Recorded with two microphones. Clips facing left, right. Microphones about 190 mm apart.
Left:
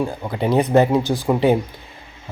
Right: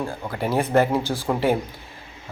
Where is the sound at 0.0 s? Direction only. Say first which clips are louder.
Left 5 dB; 15° left (ahead or behind).